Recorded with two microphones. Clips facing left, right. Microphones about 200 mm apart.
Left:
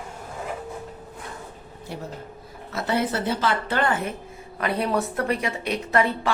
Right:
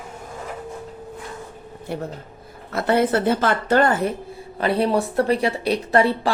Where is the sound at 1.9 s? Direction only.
55° right (ahead or behind).